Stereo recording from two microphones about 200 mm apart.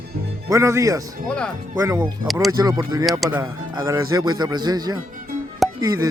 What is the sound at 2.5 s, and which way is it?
Speech, 20° right (ahead or behind).